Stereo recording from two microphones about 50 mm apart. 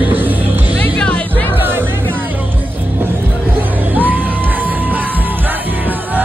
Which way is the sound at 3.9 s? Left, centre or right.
Right.